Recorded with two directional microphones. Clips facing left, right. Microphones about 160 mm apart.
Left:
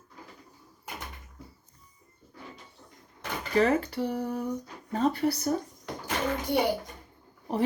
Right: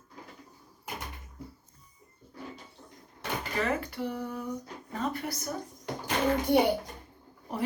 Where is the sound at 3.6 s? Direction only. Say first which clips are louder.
Left 7 dB; 30° left (ahead or behind).